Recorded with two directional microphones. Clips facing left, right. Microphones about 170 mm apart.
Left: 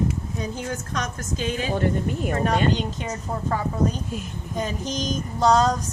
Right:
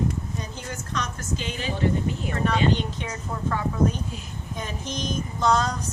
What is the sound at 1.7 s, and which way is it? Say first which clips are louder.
Speech: right 1 dB; 50° left (ahead or behind).